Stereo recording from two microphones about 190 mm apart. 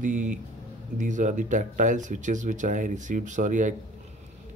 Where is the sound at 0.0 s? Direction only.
40° right (ahead or behind).